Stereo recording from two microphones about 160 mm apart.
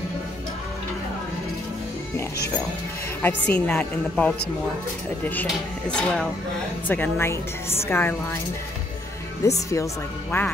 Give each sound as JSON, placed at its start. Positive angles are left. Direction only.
{"t": 3.2, "sound": "a woman's voice", "side_deg": 10}
{"t": 5.2, "sound": "a woman's voice", "side_deg": 10}
{"t": 9.4, "sound": "a woman's voice", "side_deg": 20}